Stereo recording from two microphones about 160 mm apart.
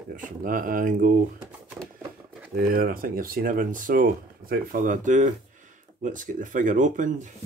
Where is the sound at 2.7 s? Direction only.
65° right (ahead or behind).